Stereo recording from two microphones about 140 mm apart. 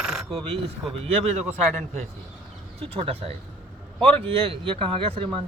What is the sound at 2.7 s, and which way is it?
Speech, 45° right (ahead or behind).